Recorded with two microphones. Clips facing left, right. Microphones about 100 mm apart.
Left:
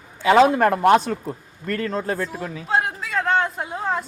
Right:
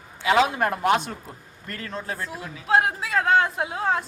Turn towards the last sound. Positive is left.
turn(degrees=0)  # may be behind; listen again after turning